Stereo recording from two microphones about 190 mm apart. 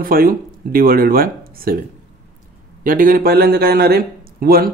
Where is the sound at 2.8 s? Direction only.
45° right (ahead or behind).